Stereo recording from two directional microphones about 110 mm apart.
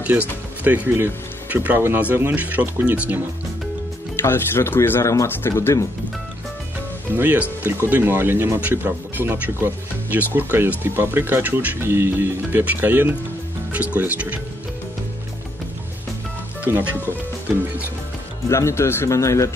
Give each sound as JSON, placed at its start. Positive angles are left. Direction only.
{"t": 0.7, "sound": "speech", "side_deg": -20}
{"t": 4.2, "sound": "speech", "side_deg": 25}
{"t": 7.2, "sound": "speech", "side_deg": -20}
{"t": 16.6, "sound": "speech", "side_deg": -15}
{"t": 18.5, "sound": "speech", "side_deg": 25}